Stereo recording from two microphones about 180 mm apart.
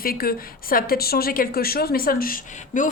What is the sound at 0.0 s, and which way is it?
A woman's voice, 55° left (ahead or behind).